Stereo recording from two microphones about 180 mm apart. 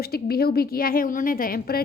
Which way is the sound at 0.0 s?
60° left (ahead or behind).